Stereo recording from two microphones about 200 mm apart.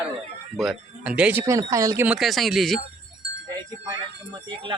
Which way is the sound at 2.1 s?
Centre (ahead or behind).